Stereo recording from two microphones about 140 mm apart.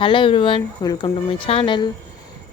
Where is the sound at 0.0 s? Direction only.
35° left (ahead or behind).